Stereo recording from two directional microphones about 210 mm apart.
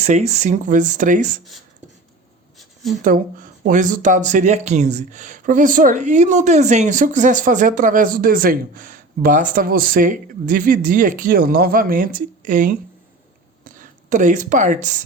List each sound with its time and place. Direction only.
0.0 s speech: 30° right (ahead or behind)
3.0 s speech: 40° right (ahead or behind)